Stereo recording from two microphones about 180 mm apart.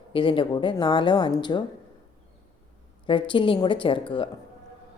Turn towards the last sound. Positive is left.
turn(degrees=30)  # may be behind; listen again after turning